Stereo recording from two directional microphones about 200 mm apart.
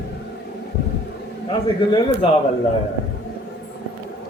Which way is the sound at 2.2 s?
30° left (ahead or behind).